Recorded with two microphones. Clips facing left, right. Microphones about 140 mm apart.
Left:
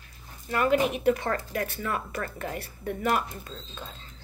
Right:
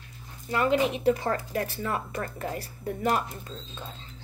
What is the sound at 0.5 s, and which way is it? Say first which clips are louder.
A woman's voice: even; 25° right (ahead or behind).